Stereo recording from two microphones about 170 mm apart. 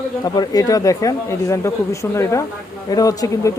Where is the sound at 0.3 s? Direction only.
20° left (ahead or behind).